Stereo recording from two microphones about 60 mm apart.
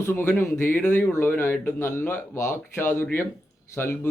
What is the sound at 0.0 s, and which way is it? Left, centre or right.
Speech, left.